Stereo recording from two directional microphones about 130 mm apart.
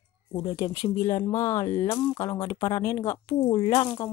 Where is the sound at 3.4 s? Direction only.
40° left (ahead or behind).